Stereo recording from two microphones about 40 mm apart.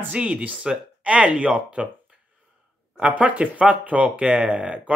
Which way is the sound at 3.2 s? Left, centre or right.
Right.